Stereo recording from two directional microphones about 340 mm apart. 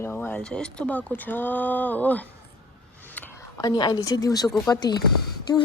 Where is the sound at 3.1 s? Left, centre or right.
Centre.